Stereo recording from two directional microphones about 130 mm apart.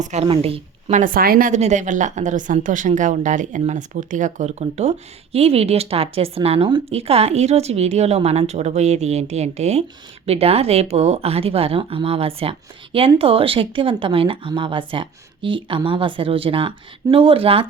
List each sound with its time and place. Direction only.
0.0 s a woman's voice: 60° right (ahead or behind)
0.3 s speech: 45° right (ahead or behind)
0.9 s a woman's voice: 80° right; by 17.7 s 45° right (ahead or behind)